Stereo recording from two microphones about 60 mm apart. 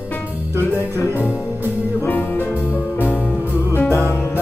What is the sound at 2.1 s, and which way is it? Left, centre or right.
Music, left.